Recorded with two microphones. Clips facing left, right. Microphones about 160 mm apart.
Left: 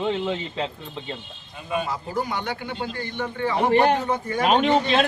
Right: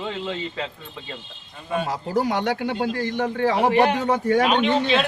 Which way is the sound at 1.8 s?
85° right.